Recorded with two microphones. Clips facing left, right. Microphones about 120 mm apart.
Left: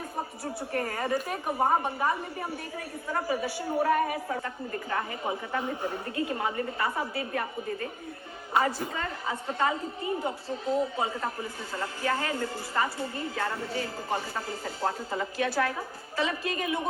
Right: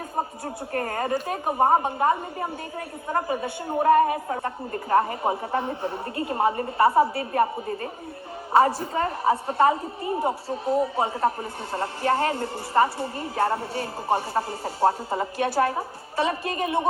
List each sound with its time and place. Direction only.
0.7 s a woman's voice: 30° right (ahead or behind)
0.9 s a woman's voice: 50° right (ahead or behind); by 9.7 s 30° right (ahead or behind)
10.9 s a man's voice: 30° right (ahead or behind)